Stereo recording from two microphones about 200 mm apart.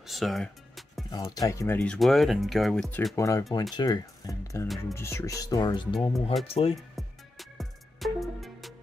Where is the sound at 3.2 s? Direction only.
15° left (ahead or behind).